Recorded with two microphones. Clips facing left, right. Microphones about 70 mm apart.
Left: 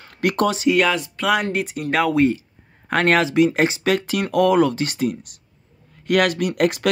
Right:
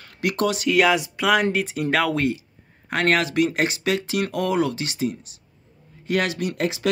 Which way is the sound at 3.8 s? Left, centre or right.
Left.